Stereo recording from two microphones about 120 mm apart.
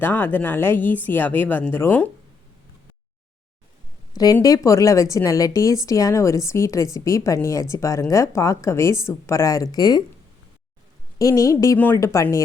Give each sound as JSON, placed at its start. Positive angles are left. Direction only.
{"t": 0.0, "sound": "speech", "side_deg": 15}
{"t": 4.1, "sound": "speech", "side_deg": 30}
{"t": 11.2, "sound": "speech", "side_deg": 25}